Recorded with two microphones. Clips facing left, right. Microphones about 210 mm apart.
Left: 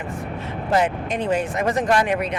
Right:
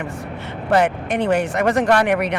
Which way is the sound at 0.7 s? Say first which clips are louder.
Right 3 dB; 70° right (ahead or behind).